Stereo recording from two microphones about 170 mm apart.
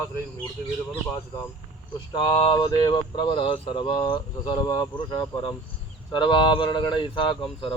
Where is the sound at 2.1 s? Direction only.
30° left (ahead or behind).